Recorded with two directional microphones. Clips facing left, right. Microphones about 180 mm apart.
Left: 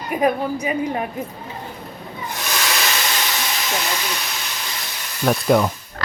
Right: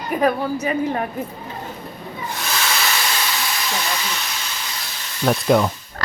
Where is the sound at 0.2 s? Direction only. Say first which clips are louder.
Even; 15° left (ahead or behind).